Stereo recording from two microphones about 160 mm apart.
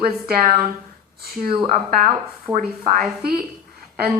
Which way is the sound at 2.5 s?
55° right (ahead or behind).